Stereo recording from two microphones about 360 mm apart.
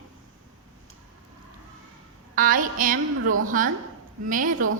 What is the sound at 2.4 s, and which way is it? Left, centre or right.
A woman's voice, right.